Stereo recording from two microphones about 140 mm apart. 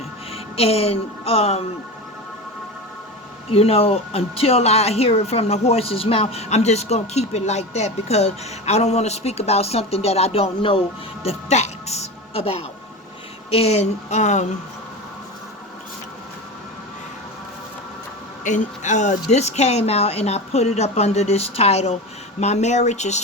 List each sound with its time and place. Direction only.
0.5 s speech: 45° left (ahead or behind)
3.5 s speech: 45° left (ahead or behind)
18.4 s speech: 60° left (ahead or behind)